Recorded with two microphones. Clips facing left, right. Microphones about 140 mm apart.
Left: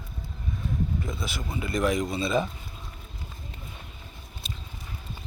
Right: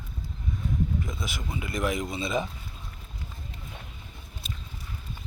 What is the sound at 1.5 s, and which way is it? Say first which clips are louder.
Speech: left 4 dB; 20° right (ahead or behind).